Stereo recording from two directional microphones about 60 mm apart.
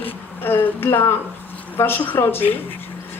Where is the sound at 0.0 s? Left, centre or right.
Left.